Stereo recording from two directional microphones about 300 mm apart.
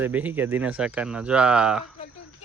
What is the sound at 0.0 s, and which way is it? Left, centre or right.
Speech, centre.